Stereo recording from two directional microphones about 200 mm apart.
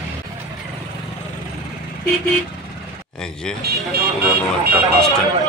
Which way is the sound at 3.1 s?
5° left (ahead or behind).